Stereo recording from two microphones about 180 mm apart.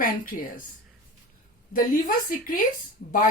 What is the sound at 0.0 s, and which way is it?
Speech, 50° left (ahead or behind).